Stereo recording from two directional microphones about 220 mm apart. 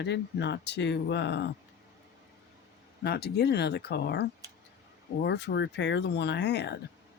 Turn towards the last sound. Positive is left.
turn(degrees=50)  # may be behind; listen again after turning